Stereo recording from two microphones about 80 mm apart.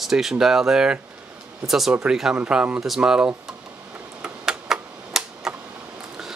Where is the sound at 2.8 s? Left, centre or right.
Centre.